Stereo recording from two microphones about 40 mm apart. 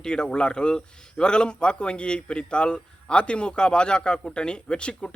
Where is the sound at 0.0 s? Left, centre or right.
Left.